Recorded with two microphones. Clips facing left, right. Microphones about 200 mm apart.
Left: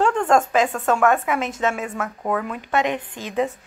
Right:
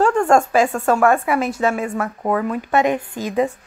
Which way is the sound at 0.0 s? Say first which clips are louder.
Right 4 dB; 10° right (ahead or behind).